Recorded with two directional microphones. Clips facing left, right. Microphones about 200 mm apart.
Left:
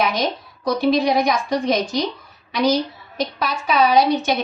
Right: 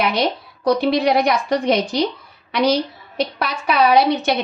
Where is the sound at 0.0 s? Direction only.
65° right (ahead or behind).